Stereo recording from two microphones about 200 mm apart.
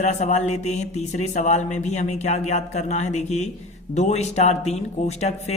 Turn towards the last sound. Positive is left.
turn(degrees=35)  # may be behind; listen again after turning